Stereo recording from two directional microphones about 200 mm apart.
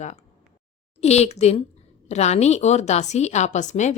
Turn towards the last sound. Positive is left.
turn(degrees=35)  # may be behind; listen again after turning